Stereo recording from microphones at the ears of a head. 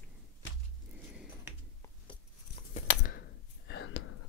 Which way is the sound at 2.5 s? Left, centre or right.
Left.